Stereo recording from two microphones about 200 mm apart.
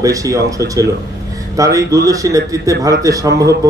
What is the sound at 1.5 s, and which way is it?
A man's voice, 15° right (ahead or behind).